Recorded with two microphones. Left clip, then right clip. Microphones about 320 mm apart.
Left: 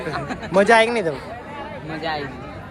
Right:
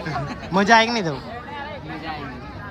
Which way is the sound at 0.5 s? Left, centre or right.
Centre.